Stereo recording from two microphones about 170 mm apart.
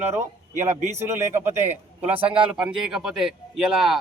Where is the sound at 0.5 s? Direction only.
45° right (ahead or behind).